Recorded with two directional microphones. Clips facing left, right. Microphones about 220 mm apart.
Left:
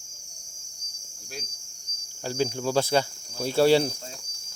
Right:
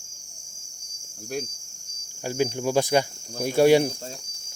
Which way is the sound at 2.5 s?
15° right (ahead or behind).